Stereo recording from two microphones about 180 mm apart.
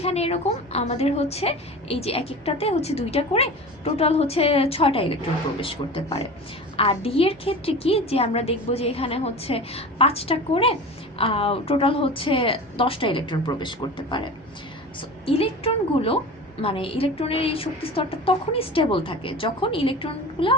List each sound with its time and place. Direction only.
0.0 s a woman's voice: 35° left (ahead or behind)
15.3 s a woman's voice: 30° left (ahead or behind)